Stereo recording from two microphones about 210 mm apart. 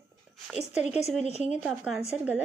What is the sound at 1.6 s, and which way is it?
Speech, 5° right (ahead or behind).